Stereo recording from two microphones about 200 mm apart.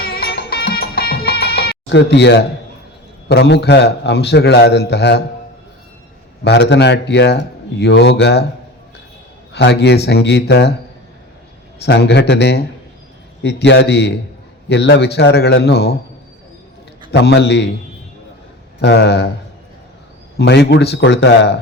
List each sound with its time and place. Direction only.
0.0 s music: 50° left (ahead or behind)
3.2 s speech: 60° left (ahead or behind)
6.4 s speech: 60° left (ahead or behind)
9.5 s speech: 55° left (ahead or behind)
11.8 s speech: 55° left (ahead or behind)
17.1 s speech: 55° left (ahead or behind)
18.8 s speech: 55° left (ahead or behind)
20.3 s speech: 60° left (ahead or behind)